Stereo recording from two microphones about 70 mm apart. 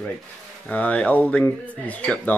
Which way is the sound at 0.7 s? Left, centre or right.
Left.